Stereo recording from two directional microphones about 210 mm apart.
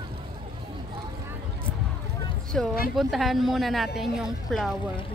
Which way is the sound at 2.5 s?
Centre (ahead or behind).